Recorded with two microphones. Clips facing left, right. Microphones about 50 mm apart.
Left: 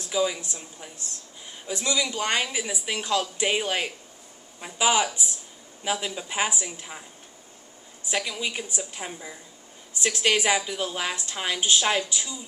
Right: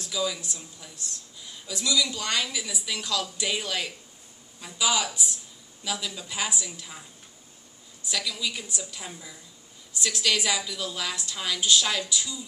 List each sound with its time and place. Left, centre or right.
0.0 s speech: left
8.0 s speech: left